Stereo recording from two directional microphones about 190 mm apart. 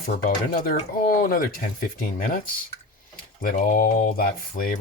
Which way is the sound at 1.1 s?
50° left (ahead or behind).